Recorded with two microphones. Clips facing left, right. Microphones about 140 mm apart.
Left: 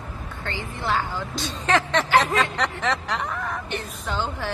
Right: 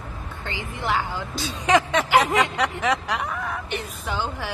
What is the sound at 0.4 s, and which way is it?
Speech, 15° right (ahead or behind).